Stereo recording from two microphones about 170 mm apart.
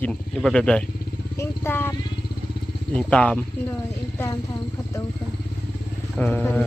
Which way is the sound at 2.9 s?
5° left (ahead or behind).